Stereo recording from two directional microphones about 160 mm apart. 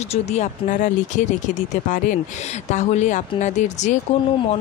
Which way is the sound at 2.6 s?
45° left (ahead or behind).